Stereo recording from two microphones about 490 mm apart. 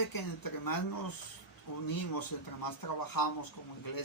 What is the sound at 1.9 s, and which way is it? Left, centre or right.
Speech, left.